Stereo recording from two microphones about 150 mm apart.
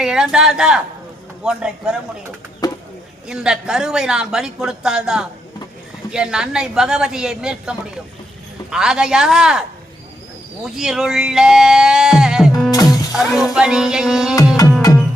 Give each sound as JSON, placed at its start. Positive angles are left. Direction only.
{"t": 0.0, "sound": "music", "side_deg": -5}
{"t": 2.6, "sound": "a sound", "side_deg": 25}
{"t": 3.2, "sound": "music", "side_deg": -5}
{"t": 10.8, "sound": "music", "side_deg": -5}
{"t": 12.7, "sound": "music", "side_deg": 25}
{"t": 13.4, "sound": "music", "side_deg": -5}
{"t": 14.8, "sound": "music", "side_deg": 25}